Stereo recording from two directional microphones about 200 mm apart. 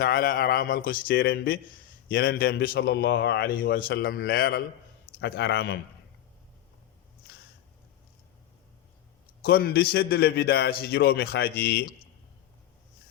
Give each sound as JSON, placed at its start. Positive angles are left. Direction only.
{"t": 0.0, "sound": "a man's voice", "side_deg": 45}
{"t": 9.4, "sound": "a man's voice", "side_deg": 50}